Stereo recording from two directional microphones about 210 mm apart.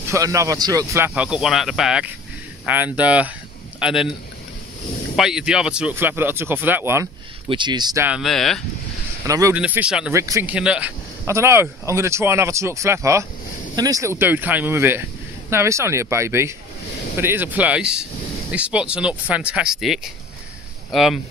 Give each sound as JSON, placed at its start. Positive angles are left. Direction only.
{"t": 0.1, "sound": "speech", "side_deg": -15}
{"t": 5.1, "sound": "speech", "side_deg": -5}
{"t": 7.4, "sound": "speech", "side_deg": -20}
{"t": 8.1, "sound": "speech", "side_deg": 0}
{"t": 9.3, "sound": "speech", "side_deg": -15}
{"t": 9.6, "sound": "speech", "side_deg": -5}